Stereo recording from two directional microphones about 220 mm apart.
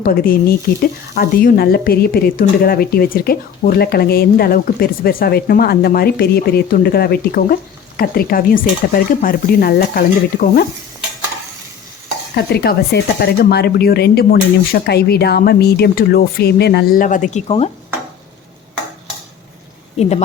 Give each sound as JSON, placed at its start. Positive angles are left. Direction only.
{"t": 0.0, "sound": "speech", "side_deg": 40}
{"t": 12.4, "sound": "speech", "side_deg": 45}
{"t": 20.0, "sound": "speech", "side_deg": 30}